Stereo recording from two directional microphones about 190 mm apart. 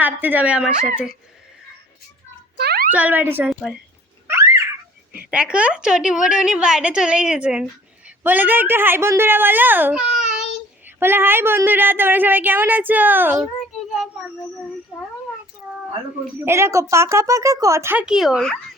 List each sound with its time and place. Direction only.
0.0 s a woman's voice: 10° right (ahead or behind)
2.6 s a sound: 55° right (ahead or behind)
2.9 s a woman's voice: 10° right (ahead or behind)
4.3 s a sound: 15° right (ahead or behind)
5.3 s a woman's voice: 5° right (ahead or behind)
13.9 s child singing: centre (ahead or behind)
16.4 s a woman's voice: 15° right (ahead or behind)